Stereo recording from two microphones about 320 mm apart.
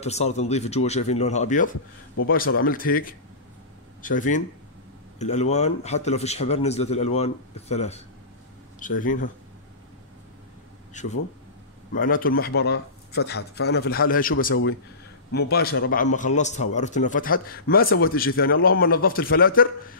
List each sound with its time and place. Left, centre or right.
0.0 s speech: centre
10.9 s speech: left